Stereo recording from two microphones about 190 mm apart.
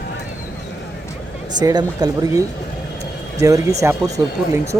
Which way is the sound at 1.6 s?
20° right (ahead or behind).